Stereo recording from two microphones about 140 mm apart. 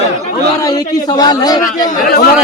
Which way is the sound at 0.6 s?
30° left (ahead or behind).